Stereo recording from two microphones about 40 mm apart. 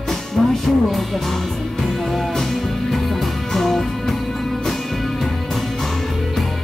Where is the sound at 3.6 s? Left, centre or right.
Centre.